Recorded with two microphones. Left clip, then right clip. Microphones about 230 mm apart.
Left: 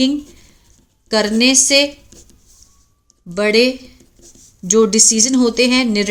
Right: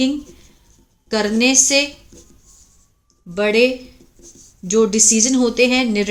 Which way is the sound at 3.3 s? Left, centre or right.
Left.